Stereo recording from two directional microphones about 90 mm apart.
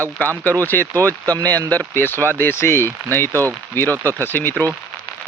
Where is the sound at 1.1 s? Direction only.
40° right (ahead or behind).